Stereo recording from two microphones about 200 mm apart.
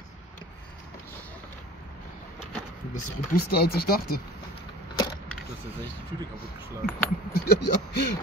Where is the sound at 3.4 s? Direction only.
50° left (ahead or behind).